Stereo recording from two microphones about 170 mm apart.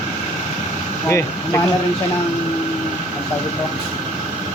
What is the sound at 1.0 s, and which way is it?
Speech, 15° left (ahead or behind).